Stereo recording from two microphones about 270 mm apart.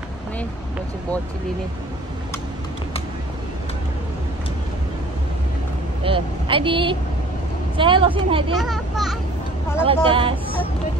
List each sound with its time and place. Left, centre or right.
6.0 s a woman's voice: centre
8.5 s a child's voice: centre
10.0 s a woman's voice: centre